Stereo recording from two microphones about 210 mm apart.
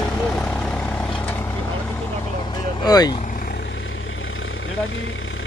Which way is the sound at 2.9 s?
20° left (ahead or behind).